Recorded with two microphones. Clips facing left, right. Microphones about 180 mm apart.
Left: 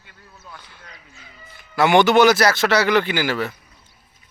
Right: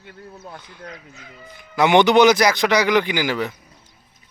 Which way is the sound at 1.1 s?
60° right (ahead or behind).